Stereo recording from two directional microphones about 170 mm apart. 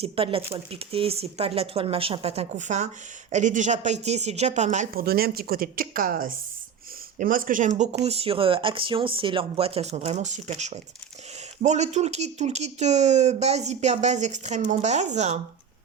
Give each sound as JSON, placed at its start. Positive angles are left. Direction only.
{"t": 0.0, "sound": "speech", "side_deg": -35}
{"t": 4.9, "sound": "speech", "side_deg": -65}